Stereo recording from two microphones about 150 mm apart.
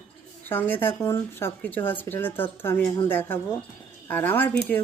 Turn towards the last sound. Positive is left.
turn(degrees=10)  # may be behind; listen again after turning